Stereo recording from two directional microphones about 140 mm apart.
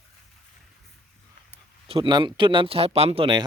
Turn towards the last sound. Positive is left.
turn(degrees=-35)  # may be behind; listen again after turning